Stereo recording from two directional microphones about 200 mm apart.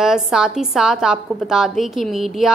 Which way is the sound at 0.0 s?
5° right (ahead or behind).